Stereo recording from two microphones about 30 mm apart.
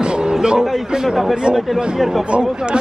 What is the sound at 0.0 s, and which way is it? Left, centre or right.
Music, right.